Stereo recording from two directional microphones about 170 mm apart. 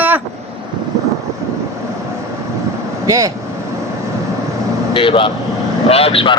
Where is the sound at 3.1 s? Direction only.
20° right (ahead or behind).